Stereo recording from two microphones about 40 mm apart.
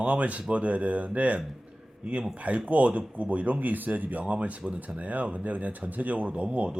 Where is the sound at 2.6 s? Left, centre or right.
Right.